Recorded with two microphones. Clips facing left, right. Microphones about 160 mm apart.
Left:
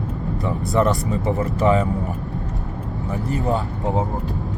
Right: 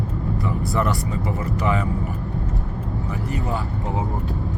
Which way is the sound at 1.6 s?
40° left (ahead or behind).